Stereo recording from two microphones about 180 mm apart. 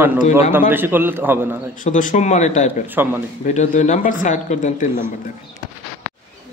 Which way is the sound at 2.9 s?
10° right (ahead or behind).